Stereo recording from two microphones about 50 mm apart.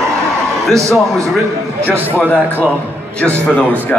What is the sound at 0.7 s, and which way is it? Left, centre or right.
Speech, right.